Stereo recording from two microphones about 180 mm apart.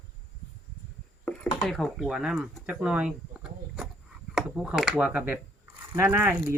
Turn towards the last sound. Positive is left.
turn(degrees=-10)  # may be behind; listen again after turning